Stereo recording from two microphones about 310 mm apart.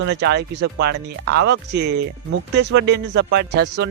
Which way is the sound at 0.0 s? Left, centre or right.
Right.